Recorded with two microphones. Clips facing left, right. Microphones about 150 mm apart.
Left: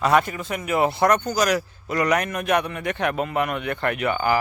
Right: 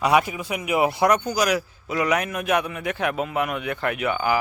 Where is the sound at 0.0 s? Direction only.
10° right (ahead or behind).